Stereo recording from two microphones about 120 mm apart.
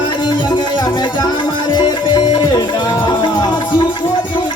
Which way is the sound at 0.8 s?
40° left (ahead or behind).